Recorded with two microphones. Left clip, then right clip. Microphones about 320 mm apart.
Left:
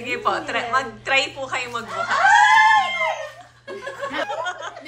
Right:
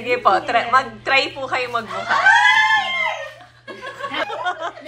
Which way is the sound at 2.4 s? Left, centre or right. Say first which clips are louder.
Left 1 dB; left.